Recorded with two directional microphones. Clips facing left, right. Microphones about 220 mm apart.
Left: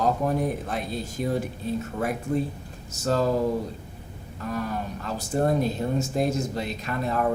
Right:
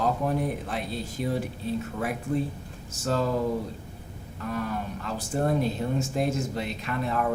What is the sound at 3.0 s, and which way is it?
Speech, 40° left (ahead or behind).